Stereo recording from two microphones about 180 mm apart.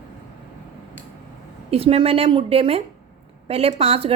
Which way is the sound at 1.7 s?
30° right (ahead or behind).